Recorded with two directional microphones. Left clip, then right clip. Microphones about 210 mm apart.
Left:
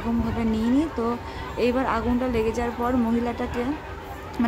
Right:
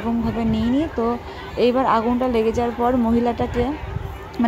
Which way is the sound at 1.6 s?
15° right (ahead or behind).